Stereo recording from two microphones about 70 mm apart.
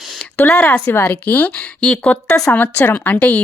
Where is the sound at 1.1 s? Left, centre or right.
Left.